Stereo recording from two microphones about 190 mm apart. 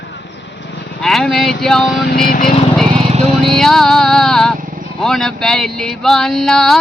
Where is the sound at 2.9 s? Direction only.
30° right (ahead or behind).